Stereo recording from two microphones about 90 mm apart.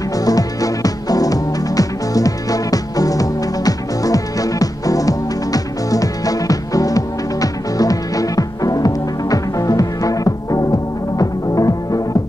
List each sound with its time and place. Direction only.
0.2 s music: 40° left (ahead or behind)